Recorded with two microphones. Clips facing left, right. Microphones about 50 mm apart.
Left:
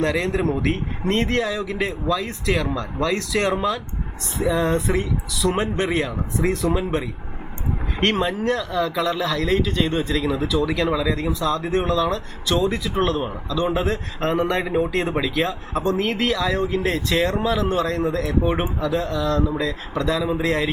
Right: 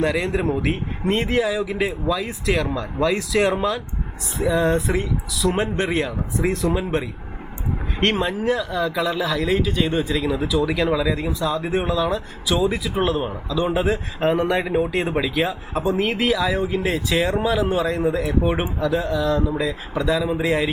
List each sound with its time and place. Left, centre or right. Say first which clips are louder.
0.0 s speech: even; centre